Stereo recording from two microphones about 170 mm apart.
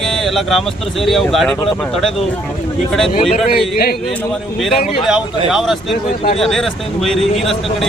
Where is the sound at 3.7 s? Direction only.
65° left (ahead or behind).